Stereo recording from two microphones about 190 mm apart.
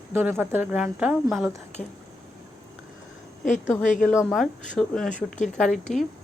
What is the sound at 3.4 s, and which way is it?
Speech, 40° left (ahead or behind).